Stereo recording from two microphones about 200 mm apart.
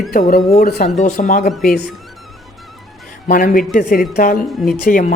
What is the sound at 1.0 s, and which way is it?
Speech, 35° left (ahead or behind).